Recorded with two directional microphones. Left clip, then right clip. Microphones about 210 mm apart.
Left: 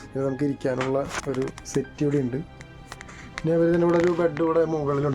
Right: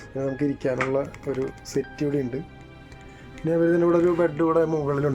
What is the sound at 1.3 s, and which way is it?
Speech, 55° left (ahead or behind).